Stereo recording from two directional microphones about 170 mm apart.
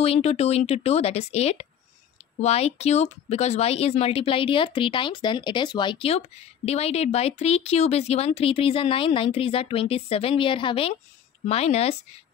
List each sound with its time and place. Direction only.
0.0 s speech: 35° left (ahead or behind)